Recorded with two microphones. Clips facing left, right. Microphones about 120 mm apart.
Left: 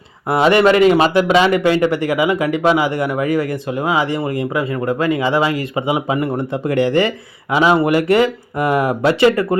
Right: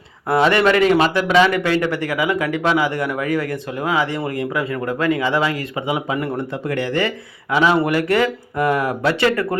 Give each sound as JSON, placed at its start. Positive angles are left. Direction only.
{"t": 0.3, "sound": "speech", "side_deg": 15}